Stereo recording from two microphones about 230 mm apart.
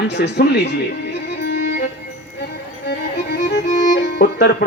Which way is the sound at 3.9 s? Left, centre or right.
Left.